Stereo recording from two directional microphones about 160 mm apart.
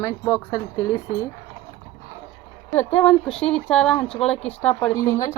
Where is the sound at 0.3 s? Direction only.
20° left (ahead or behind).